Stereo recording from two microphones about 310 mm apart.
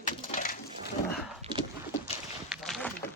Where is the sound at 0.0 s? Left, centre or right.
Left.